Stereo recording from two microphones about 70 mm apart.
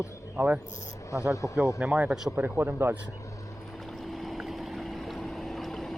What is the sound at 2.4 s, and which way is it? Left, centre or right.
Speech, right.